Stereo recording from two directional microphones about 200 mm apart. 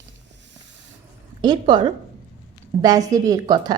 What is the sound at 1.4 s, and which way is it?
A woman's voice, 25° right (ahead or behind).